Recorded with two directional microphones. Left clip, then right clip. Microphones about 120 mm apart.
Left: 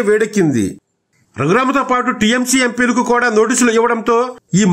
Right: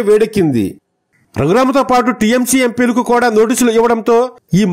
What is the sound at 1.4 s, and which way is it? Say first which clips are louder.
A man's voice: right 2 dB; 50° right (ahead or behind).